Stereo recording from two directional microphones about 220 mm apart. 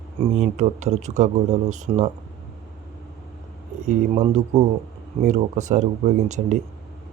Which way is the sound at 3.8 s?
30° right (ahead or behind).